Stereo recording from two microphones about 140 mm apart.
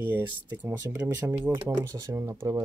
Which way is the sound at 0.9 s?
15° right (ahead or behind).